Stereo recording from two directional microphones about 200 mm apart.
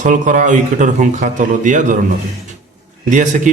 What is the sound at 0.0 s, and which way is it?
A man's voice, 40° right (ahead or behind).